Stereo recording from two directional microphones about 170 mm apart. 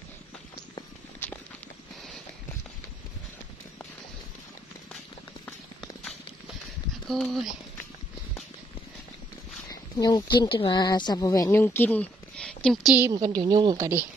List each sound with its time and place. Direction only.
1.2 s walk: 10° left (ahead or behind)
7.1 s speech: centre (ahead or behind)
9.7 s speech: 20° left (ahead or behind); by 13.0 s centre (ahead or behind)
13.0 s speech: 20° right (ahead or behind)